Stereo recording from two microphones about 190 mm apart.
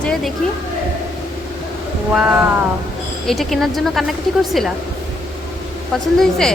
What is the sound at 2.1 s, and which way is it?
A woman's voice, 5° right (ahead or behind).